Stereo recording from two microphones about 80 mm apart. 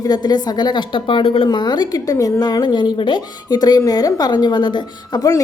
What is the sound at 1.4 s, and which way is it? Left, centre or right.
Speech, left.